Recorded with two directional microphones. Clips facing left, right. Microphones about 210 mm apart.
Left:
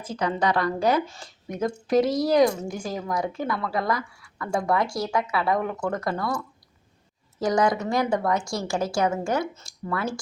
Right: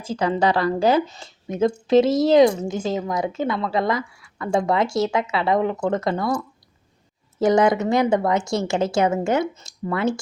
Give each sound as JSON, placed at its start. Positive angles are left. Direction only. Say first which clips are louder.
{"t": 0.0, "sound": "a woman's voice", "louder": "right 4 dB", "side_deg": -30}